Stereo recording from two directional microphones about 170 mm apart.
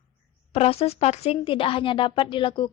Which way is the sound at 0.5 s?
35° left (ahead or behind).